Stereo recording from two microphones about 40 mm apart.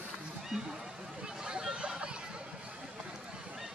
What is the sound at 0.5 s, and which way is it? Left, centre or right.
Speech, centre.